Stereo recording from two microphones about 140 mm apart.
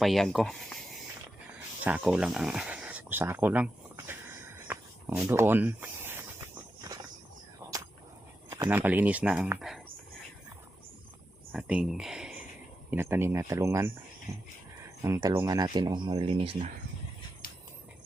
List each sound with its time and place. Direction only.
0.0 s speech: centre (ahead or behind)
2.0 s speech: 5° right (ahead or behind)
4.7 s snake: 15° right (ahead or behind)
8.4 s a sound: 25° right (ahead or behind)
8.7 s speech: 15° right (ahead or behind)
11.5 s speech: 5° right (ahead or behind)
12.9 s speech: 15° right (ahead or behind)
15.0 s speech: 20° right (ahead or behind); by 16.6 s 40° right (ahead or behind)